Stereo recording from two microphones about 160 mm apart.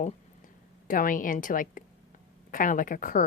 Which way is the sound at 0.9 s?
60° left (ahead or behind).